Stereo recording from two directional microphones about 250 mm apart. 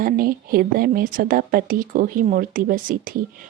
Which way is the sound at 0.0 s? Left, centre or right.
Right.